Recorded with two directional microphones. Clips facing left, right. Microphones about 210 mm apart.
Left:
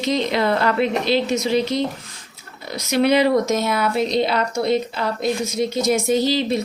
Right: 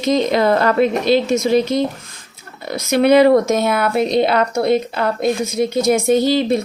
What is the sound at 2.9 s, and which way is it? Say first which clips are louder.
Speech: right 5 dB; 55° right (ahead or behind).